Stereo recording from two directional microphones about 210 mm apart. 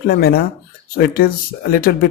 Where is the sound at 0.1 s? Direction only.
45° left (ahead or behind).